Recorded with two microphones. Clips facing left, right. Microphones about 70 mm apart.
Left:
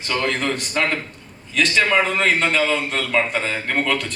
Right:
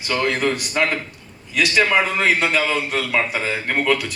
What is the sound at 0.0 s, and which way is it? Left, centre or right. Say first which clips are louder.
A man's voice: right 2 dB; centre.